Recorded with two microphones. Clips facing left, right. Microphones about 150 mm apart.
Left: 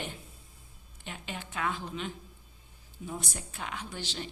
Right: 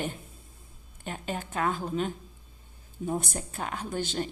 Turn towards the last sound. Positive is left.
turn(degrees=-50)  # may be behind; listen again after turning